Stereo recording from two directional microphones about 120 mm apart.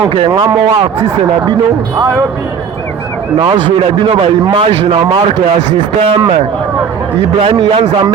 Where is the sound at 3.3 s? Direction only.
40° right (ahead or behind).